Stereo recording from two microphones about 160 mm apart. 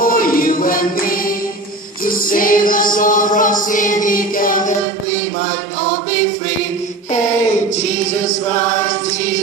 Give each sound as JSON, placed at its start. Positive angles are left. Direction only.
{"t": 0.0, "sound": "music", "side_deg": 60}
{"t": 2.0, "sound": "choir", "side_deg": 60}